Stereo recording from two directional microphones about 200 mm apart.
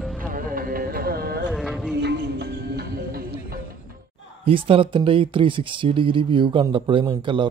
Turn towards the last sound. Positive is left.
turn(degrees=-25)  # may be behind; listen again after turning